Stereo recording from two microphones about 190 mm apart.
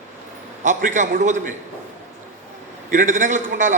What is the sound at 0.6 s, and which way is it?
Speech, 40° right (ahead or behind).